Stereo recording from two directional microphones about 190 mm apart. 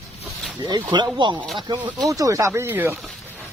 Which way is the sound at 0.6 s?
20° right (ahead or behind).